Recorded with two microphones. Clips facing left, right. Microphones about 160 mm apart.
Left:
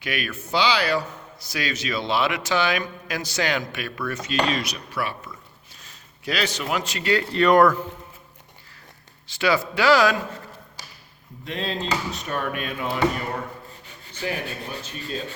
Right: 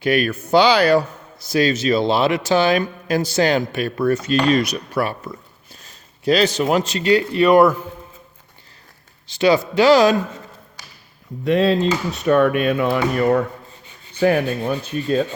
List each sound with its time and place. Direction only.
0.0 s speech: 35° right (ahead or behind)
1.5 s speech: 25° right (ahead or behind); by 5.4 s 45° right (ahead or behind)
5.8 s a sound: 30° right (ahead or behind)
6.9 s speech: 20° right (ahead or behind)
9.4 s speech: 20° right (ahead or behind)
11.4 s speech: 70° right (ahead or behind)
14.2 s rub: 55° right (ahead or behind)